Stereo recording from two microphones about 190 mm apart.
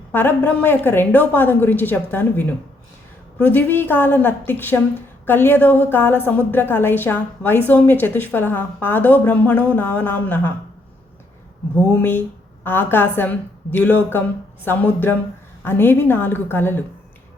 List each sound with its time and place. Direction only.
0.1 s a woman's voice: 10° left (ahead or behind)
11.9 s a woman's voice: 10° left (ahead or behind)